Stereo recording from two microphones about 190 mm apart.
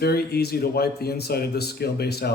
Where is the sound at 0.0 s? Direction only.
55° left (ahead or behind).